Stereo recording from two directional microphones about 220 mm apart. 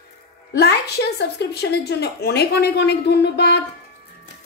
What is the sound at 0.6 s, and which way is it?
Speech, 50° left (ahead or behind).